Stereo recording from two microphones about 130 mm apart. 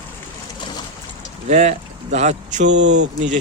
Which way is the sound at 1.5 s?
60° right (ahead or behind).